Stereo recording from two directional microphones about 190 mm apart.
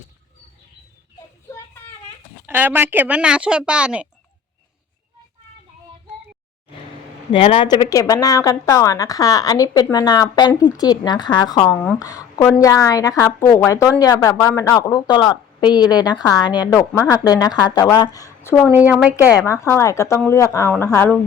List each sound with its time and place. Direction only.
2.5 s speech: 10° right (ahead or behind)
7.3 s a woman's voice: 30° left (ahead or behind)
18.7 s speech: 10° right (ahead or behind)
19.3 s a woman's voice: 15° left (ahead or behind)